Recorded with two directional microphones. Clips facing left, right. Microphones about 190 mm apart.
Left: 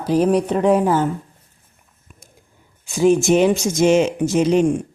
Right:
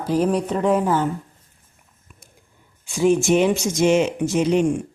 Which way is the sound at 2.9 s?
40° left (ahead or behind).